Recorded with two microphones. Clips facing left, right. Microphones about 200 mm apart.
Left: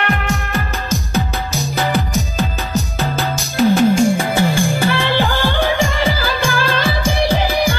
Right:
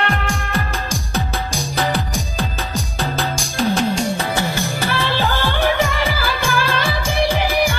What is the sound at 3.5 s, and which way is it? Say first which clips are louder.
Music: left 7 dB; 5° left (ahead or behind).